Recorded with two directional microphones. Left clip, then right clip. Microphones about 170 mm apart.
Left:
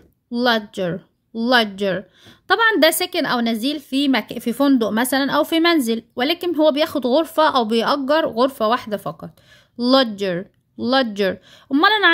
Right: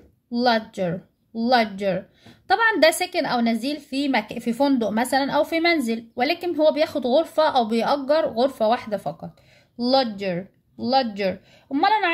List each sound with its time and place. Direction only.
0.3 s speech: 40° left (ahead or behind)
10.9 s speech: 55° left (ahead or behind)